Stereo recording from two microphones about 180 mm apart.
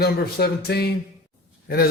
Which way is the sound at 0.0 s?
60° left (ahead or behind).